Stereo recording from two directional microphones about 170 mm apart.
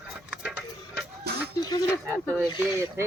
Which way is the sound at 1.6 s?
25° left (ahead or behind).